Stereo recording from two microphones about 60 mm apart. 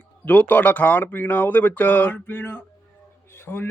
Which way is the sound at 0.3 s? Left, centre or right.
Left.